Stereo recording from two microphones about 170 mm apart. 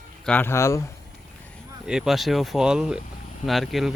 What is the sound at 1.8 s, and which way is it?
Speech, 5° right (ahead or behind).